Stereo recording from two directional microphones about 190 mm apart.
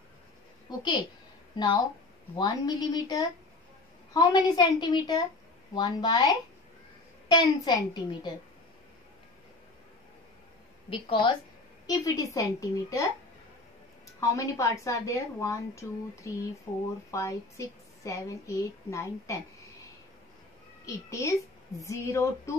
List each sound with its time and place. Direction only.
0.7 s a child's voice: 20° left (ahead or behind)
2.3 s a child's voice: 20° left (ahead or behind)
10.9 s a child's voice: 25° left (ahead or behind)
14.2 s a woman's voice: 15° left (ahead or behind)
20.8 s a woman's voice: 15° left (ahead or behind)